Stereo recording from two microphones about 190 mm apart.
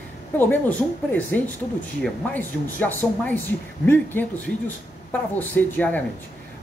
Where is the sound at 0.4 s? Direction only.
10° left (ahead or behind).